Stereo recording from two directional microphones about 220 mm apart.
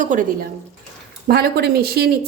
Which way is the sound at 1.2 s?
45° right (ahead or behind).